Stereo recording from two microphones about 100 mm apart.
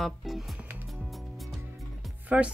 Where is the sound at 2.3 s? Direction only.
15° right (ahead or behind).